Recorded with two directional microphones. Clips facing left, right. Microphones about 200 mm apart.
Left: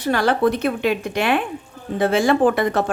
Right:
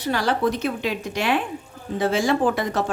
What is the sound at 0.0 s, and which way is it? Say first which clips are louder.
A woman's voice: left 4 dB; 55° left (ahead or behind).